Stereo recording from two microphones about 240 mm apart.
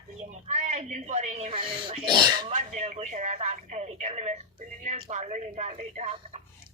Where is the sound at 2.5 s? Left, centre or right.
Right.